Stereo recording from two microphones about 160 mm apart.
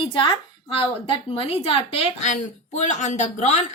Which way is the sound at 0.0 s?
30° left (ahead or behind).